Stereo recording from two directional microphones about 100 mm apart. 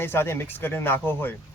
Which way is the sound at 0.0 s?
25° left (ahead or behind).